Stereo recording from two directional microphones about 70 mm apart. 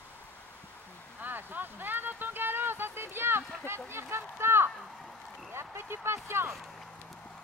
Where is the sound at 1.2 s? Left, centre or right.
Right.